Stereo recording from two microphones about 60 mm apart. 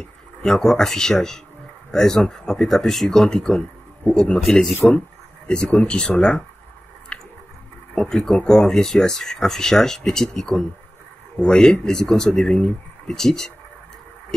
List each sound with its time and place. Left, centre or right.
0.0 s speech: centre
7.1 s squish: centre
7.9 s speech: centre